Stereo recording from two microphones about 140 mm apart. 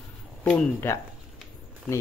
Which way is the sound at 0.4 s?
10° left (ahead or behind).